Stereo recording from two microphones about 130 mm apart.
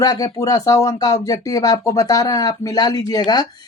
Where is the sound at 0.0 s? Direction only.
30° left (ahead or behind).